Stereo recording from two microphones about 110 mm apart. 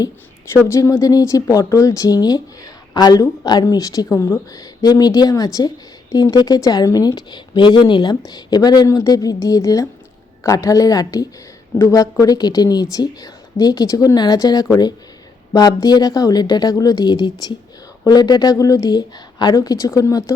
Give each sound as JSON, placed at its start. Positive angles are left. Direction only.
{"t": 0.5, "sound": "speech", "side_deg": 30}